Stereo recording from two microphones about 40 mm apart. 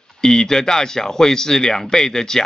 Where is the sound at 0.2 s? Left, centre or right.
Centre.